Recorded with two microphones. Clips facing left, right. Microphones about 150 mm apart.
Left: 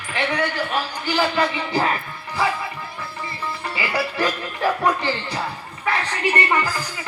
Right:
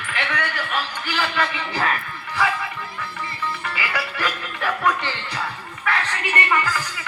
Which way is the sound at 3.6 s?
35° left (ahead or behind).